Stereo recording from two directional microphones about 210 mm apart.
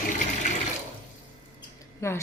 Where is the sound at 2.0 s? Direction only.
15° left (ahead or behind).